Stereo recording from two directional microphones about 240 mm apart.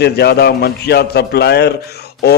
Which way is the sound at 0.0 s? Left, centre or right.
Left.